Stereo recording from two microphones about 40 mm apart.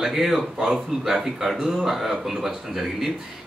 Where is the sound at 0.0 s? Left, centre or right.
Centre.